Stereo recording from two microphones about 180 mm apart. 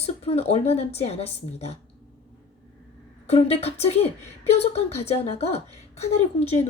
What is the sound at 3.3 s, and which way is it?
A woman's voice, 35° left (ahead or behind).